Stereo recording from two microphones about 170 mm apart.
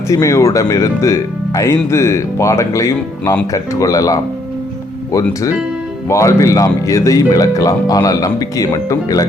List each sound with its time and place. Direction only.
0.1 s speech: 20° left (ahead or behind)
6.1 s speech: 15° left (ahead or behind)